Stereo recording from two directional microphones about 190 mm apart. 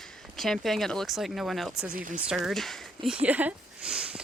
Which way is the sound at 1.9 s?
45° right (ahead or behind).